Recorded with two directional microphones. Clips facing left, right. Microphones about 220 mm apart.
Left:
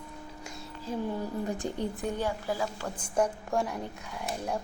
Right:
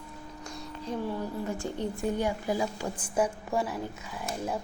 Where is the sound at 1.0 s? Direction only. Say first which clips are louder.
Left 2 dB; 15° left (ahead or behind).